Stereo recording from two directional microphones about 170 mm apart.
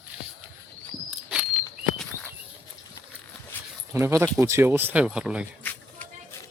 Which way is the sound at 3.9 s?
15° right (ahead or behind).